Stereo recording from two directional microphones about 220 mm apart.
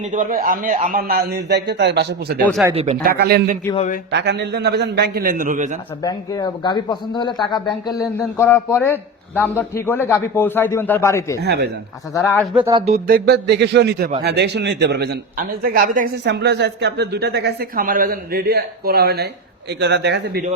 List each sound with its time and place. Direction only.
0.1 s a man's voice: 35° right (ahead or behind)
2.7 s a man's voice: 30° right (ahead or behind)
6.0 s a man's voice: 15° left (ahead or behind)
11.3 s a man's voice: 45° right (ahead or behind)
12.1 s a man's voice: 10° left (ahead or behind)
12.5 s speech: 20° right (ahead or behind)
12.9 s a man's voice: 40° right (ahead or behind)